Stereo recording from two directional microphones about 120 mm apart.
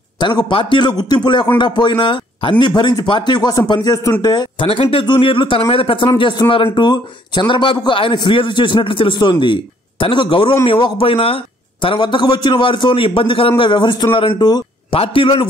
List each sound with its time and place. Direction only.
0.2 s speech: 40° left (ahead or behind)
4.6 s a man's voice: 50° left (ahead or behind)